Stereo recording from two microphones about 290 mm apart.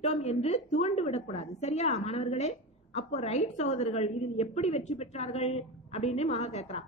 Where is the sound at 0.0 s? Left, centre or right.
Left.